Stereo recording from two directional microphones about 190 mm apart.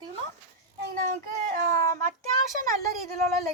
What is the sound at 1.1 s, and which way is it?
Speech, 45° right (ahead or behind).